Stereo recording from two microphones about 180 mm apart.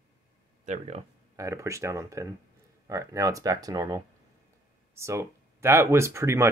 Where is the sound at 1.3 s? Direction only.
15° right (ahead or behind).